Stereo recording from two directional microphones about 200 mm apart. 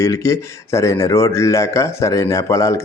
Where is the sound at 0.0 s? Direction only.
15° left (ahead or behind).